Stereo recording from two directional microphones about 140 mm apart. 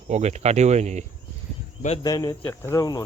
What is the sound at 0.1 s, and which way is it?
Speech, 55° right (ahead or behind).